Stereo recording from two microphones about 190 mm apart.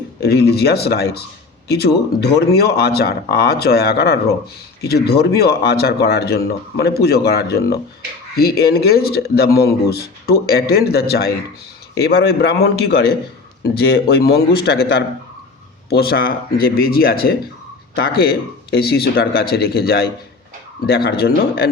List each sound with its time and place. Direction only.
0.2 s speech: 55° left (ahead or behind)